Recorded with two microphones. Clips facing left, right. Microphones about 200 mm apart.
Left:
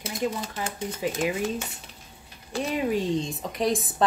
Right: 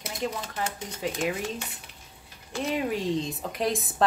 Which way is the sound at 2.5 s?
35° left (ahead or behind).